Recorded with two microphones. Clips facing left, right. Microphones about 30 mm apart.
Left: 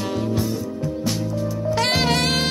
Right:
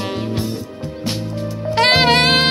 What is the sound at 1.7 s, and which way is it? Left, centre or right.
Music, right.